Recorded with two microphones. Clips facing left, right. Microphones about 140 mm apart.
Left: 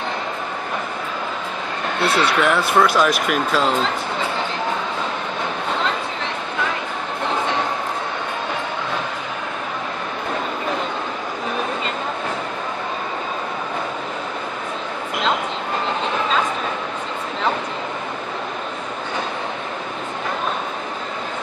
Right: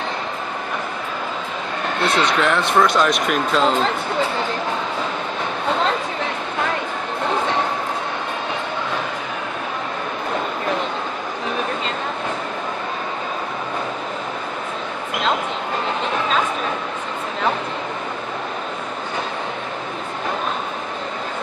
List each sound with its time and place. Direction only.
2.0 s speech: 5° left (ahead or behind)